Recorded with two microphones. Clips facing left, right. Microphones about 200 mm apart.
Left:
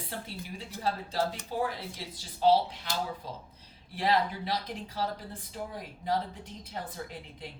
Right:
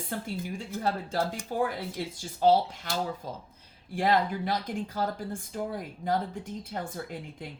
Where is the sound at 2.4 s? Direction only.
45° right (ahead or behind).